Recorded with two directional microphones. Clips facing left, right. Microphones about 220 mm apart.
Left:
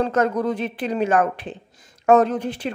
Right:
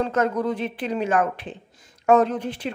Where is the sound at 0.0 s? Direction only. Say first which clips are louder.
Left 2 dB; 40° left (ahead or behind).